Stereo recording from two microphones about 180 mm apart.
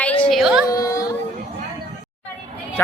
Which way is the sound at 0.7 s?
20° left (ahead or behind).